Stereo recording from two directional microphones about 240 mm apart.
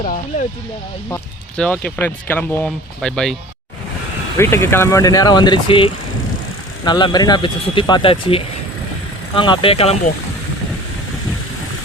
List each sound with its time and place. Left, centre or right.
0.0 s speech: left
1.1 s speech: centre
4.4 s speech: centre